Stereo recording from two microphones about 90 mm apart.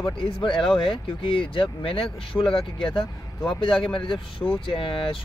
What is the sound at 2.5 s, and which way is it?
Speech, 65° left (ahead or behind).